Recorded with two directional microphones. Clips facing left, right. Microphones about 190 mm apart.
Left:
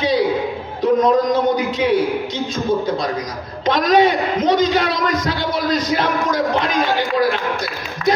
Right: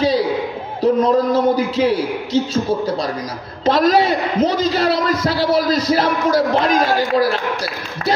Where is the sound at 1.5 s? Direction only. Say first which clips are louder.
Right 1 dB; 35° right (ahead or behind).